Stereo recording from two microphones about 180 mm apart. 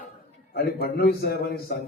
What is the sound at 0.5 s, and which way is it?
A man's voice, 60° left (ahead or behind).